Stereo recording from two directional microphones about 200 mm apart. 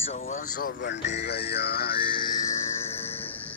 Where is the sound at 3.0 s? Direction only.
30° left (ahead or behind).